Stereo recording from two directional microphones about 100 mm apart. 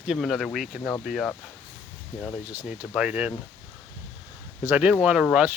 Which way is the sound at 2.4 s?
15° right (ahead or behind).